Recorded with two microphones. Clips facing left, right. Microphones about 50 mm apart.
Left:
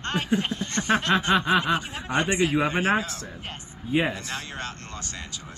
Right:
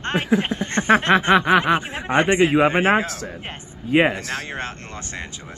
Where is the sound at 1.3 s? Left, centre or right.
Right.